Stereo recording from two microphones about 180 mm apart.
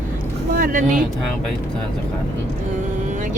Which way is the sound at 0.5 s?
45° right (ahead or behind).